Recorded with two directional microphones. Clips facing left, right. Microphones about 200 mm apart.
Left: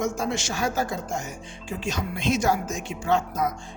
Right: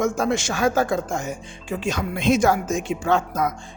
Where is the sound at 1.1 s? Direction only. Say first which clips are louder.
Right 4 dB; 90° right.